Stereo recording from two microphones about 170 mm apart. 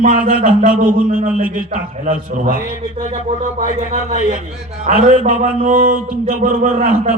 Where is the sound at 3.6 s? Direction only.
45° right (ahead or behind).